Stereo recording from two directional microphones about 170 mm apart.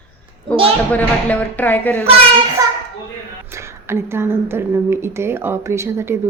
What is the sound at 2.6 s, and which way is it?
A child's voice, 20° right (ahead or behind).